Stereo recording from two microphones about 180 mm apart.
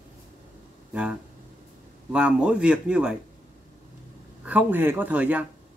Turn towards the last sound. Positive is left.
turn(degrees=-10)  # may be behind; listen again after turning